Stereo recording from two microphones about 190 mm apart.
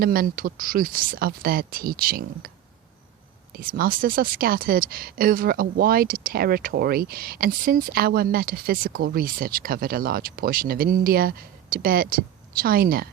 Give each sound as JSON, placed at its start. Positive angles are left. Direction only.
{"t": 0.0, "sound": "speech", "side_deg": -50}
{"t": 3.5, "sound": "speech", "side_deg": -50}